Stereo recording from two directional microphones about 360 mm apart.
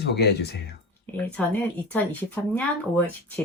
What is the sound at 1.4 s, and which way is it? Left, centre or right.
Speech, centre.